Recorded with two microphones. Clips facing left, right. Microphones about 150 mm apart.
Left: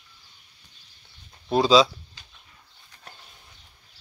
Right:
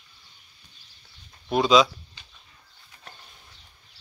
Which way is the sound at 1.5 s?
30° left (ahead or behind).